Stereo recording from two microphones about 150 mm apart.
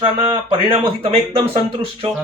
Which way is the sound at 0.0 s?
35° right (ahead or behind).